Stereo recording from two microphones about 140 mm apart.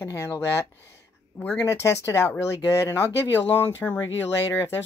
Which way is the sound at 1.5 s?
20° left (ahead or behind).